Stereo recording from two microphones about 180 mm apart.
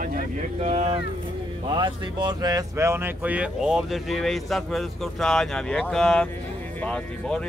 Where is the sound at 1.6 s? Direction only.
25° right (ahead or behind).